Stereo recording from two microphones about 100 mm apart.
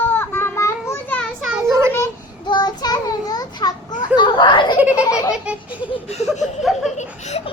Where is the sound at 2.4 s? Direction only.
45° left (ahead or behind).